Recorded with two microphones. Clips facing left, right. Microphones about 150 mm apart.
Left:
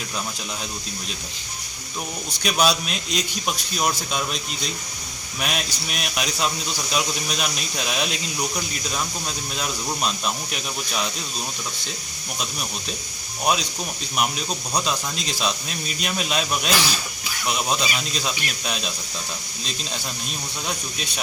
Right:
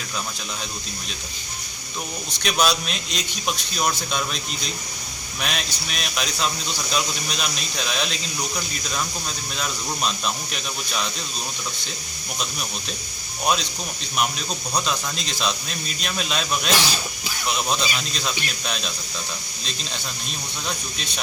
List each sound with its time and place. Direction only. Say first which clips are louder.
2.4 s a man's voice: left 1 dB; 5° left (ahead or behind)
14.8 s a man's voice: left 1 dB; 5° left (ahead or behind)